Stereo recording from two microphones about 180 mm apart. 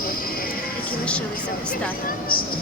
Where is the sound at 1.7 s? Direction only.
50° left (ahead or behind).